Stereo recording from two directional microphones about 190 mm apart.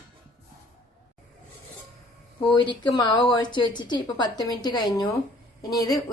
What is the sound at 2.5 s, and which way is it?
A woman's voice, 25° left (ahead or behind).